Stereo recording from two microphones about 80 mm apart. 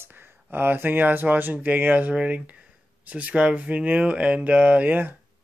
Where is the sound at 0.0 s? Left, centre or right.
Right.